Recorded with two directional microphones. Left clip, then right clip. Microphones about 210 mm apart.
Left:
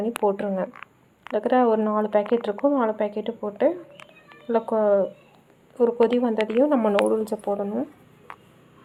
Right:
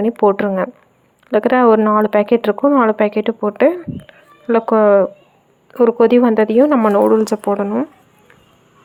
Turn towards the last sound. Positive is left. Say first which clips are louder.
# right 9 dB
turn(degrees=-35)  # may be behind; listen again after turning